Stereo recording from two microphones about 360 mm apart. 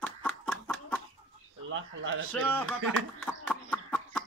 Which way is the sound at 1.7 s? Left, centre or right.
Right.